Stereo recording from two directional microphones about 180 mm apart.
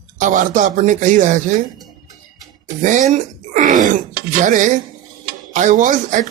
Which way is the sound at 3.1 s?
45° right (ahead or behind).